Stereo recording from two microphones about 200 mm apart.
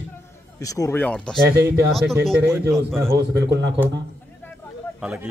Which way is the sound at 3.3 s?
60° right (ahead or behind).